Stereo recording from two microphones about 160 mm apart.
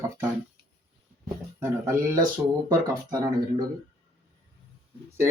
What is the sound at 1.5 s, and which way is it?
Speech, 15° right (ahead or behind).